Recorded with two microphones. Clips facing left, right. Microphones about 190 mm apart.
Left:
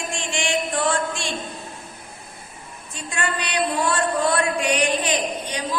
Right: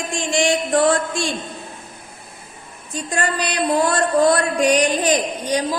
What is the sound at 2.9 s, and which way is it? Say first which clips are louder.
A woman's voice: right 5 dB; 40° right (ahead or behind).